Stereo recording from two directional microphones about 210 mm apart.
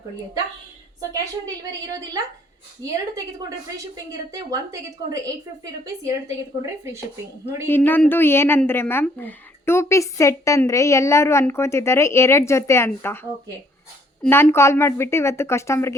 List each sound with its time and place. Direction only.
1.5 s a woman's voice: 15° right (ahead or behind)
4.3 s a woman's voice: 15° right (ahead or behind)
7.7 s a woman's voice: 10° left (ahead or behind)
14.2 s a woman's voice: 10° left (ahead or behind)